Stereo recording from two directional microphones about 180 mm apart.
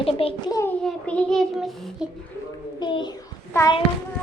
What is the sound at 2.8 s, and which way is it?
Speech, 25° left (ahead or behind).